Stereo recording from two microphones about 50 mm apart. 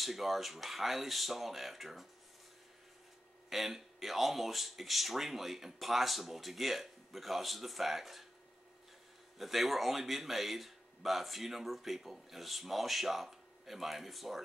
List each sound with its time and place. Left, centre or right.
0.0 s speech: centre
3.4 s speech: centre
9.4 s speech: centre